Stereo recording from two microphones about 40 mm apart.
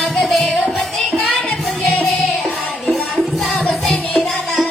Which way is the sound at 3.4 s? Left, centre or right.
Centre.